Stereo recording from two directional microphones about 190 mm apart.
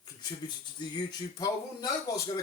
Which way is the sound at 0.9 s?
20° left (ahead or behind).